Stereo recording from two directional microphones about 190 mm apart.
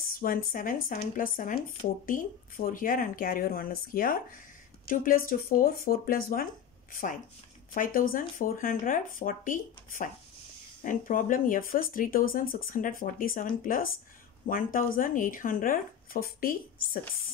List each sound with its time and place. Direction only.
0.2 s speech: 45° left (ahead or behind)